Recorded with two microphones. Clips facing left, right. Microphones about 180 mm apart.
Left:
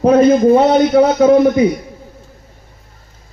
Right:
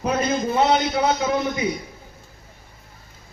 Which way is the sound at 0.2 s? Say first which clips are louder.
Left 12 dB; 50° left (ahead or behind).